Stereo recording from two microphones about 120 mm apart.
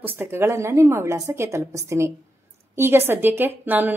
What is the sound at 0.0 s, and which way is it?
A woman's voice, 20° right (ahead or behind).